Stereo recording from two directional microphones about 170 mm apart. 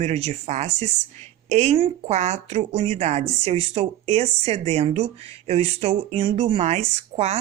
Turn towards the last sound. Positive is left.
turn(degrees=-40)  # may be behind; listen again after turning